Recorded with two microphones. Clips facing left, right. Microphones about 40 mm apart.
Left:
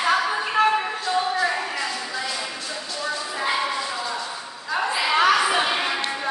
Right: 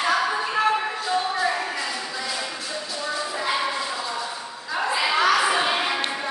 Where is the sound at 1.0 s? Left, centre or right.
Centre.